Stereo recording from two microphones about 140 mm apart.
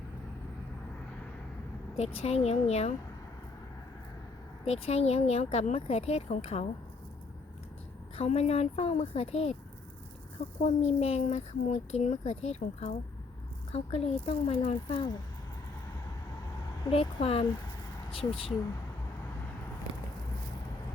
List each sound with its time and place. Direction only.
2.0 s speech: 50° left (ahead or behind)
4.6 s speech: 45° left (ahead or behind)
8.1 s speech: 50° left (ahead or behind)
10.6 s speech: 50° left (ahead or behind)
14.8 s speech: 35° left (ahead or behind)
16.9 s speech: 45° left (ahead or behind)